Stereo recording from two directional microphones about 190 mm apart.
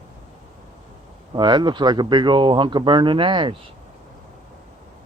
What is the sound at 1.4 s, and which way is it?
Speech, 25° right (ahead or behind).